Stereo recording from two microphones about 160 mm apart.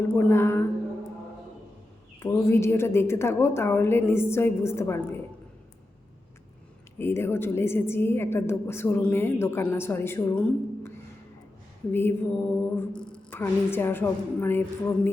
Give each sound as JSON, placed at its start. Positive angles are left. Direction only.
{"t": 0.1, "sound": "a woman's voice", "side_deg": 15}
{"t": 2.2, "sound": "a woman's voice", "side_deg": 15}
{"t": 7.0, "sound": "a woman's voice", "side_deg": 15}
{"t": 12.5, "sound": "mantra", "side_deg": 10}
{"t": 13.4, "sound": "a woman's voice", "side_deg": 15}